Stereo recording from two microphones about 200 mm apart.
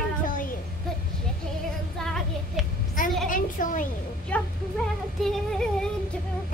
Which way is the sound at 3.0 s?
40° left (ahead or behind).